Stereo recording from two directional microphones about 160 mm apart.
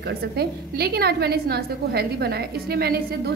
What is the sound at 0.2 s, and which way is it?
A woman's voice, 80° right.